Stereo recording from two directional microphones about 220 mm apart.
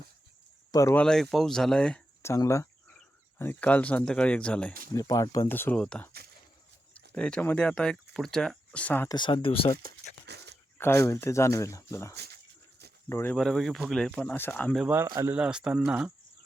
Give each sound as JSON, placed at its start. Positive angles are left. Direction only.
{"t": 0.7, "sound": "speech", "side_deg": 15}
{"t": 4.9, "sound": "speech", "side_deg": 15}
{"t": 7.1, "sound": "speech", "side_deg": 5}
{"t": 9.1, "sound": "speech", "side_deg": 20}
{"t": 10.2, "sound": "a sound", "side_deg": -50}
{"t": 10.8, "sound": "speech", "side_deg": 10}
{"t": 12.1, "sound": "speech", "side_deg": -45}
{"t": 13.1, "sound": "speech", "side_deg": 10}